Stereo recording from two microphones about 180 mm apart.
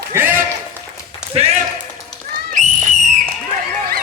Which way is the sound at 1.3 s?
35° right (ahead or behind).